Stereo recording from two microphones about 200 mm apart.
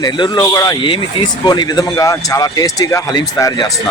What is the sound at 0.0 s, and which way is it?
A man's voice, 20° left (ahead or behind).